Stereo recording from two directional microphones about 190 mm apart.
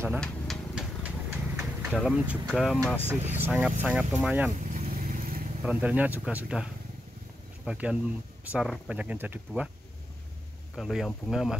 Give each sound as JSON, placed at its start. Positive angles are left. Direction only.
{"t": 0.2, "sound": "a sound", "side_deg": 0}
{"t": 2.0, "sound": "speech", "side_deg": 0}
{"t": 3.3, "sound": "speech", "side_deg": -10}
{"t": 4.7, "sound": "vehicle", "side_deg": -50}
{"t": 5.6, "sound": "speech", "side_deg": -10}
{"t": 10.8, "sound": "speech", "side_deg": 0}